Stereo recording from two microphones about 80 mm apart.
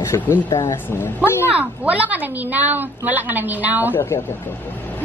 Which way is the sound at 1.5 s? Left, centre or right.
Centre.